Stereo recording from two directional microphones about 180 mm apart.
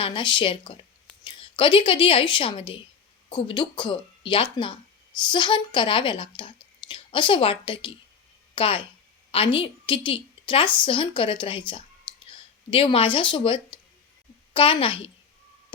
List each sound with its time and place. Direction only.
0.0 s a woman's voice: 25° left (ahead or behind)